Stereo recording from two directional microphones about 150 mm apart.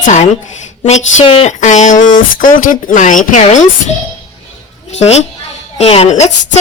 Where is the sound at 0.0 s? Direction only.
50° left (ahead or behind).